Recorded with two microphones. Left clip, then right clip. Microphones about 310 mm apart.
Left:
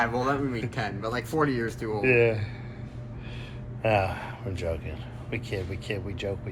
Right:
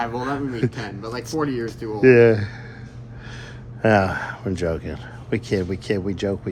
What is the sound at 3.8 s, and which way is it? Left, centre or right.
Speech, right.